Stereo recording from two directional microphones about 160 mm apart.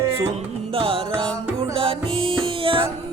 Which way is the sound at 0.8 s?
35° right (ahead or behind).